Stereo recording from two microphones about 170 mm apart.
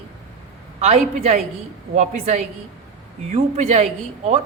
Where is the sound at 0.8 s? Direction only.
40° right (ahead or behind).